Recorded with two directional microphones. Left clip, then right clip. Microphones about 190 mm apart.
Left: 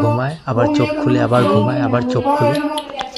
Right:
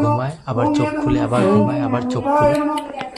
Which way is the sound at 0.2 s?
15° left (ahead or behind).